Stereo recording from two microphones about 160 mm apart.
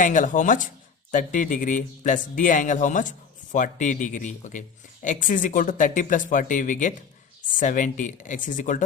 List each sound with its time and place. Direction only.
0.0 s speech: 50° left (ahead or behind)